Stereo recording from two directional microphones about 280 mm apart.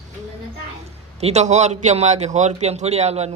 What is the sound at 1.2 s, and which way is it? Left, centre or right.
A man's voice, right.